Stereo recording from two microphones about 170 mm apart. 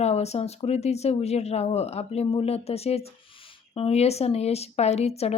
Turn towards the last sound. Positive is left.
turn(degrees=40)  # may be behind; listen again after turning